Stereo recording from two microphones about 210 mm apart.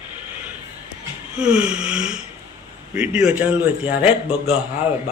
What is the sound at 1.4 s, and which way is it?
Gasp, 5° right (ahead or behind).